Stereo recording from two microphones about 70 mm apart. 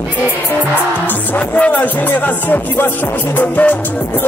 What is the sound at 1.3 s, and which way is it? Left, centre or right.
Music, centre.